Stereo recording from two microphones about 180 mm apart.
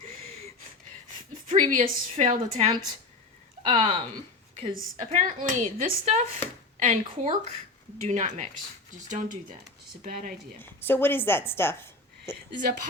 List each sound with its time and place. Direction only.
1.5 s speech: 45° right (ahead or behind)
3.6 s speech: 25° right (ahead or behind)
4.7 s speech: 45° right (ahead or behind)
10.6 s a woman's voice: 10° left (ahead or behind)
12.5 s speech: 45° right (ahead or behind)